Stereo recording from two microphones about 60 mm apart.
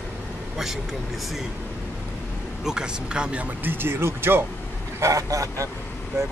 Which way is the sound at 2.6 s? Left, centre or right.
Centre.